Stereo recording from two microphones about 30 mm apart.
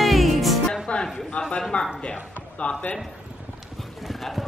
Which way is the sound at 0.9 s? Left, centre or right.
Left.